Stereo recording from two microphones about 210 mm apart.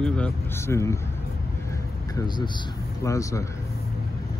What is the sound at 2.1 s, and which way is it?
A man's voice, 20° left (ahead or behind).